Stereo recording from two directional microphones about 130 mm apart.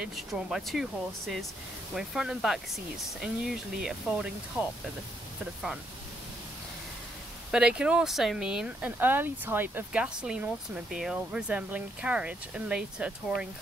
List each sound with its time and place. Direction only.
0.0 s speech: centre (ahead or behind)
7.5 s speech: 5° right (ahead or behind)